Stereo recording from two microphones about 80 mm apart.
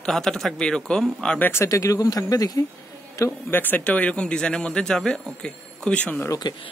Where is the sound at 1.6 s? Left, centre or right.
Left.